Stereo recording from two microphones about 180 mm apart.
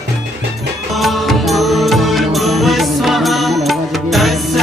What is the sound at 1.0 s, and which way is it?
Mantra, centre (ahead or behind).